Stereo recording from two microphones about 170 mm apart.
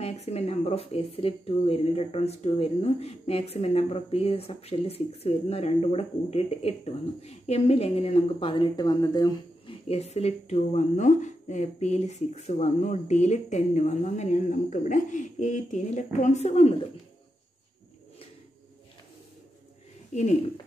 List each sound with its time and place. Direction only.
0.0 s speech: 40° left (ahead or behind); by 9.8 s 20° left (ahead or behind)
9.8 s a woman's voice: 40° left (ahead or behind)
20.1 s a woman's voice: 45° left (ahead or behind)